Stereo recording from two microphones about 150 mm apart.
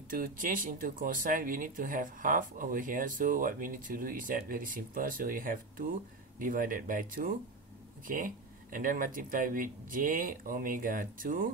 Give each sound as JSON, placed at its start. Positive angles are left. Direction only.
{"t": 0.1, "sound": "speech", "side_deg": -65}
{"t": 8.7, "sound": "speech", "side_deg": -65}